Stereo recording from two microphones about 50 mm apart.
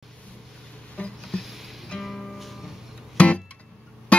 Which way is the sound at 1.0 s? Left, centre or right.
Left.